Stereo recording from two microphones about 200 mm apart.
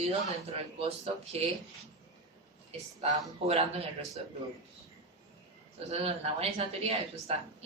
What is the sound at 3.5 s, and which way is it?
Speech, 30° right (ahead or behind).